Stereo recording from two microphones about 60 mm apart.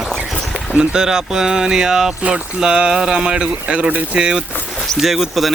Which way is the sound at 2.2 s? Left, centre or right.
Right.